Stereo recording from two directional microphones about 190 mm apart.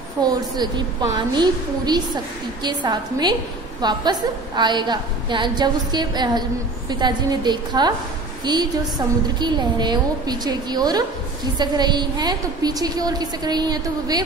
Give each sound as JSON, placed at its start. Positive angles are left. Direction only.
{"t": 0.2, "sound": "a woman's voice", "side_deg": -20}